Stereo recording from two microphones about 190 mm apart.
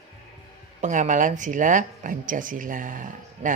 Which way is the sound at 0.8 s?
40° right (ahead or behind).